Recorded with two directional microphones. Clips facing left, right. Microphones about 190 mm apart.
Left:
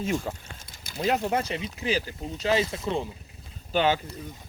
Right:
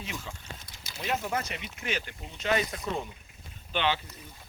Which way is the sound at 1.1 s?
30° left (ahead or behind).